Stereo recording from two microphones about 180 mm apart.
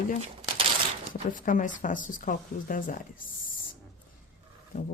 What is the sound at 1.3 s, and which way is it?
Speech, 45° left (ahead or behind).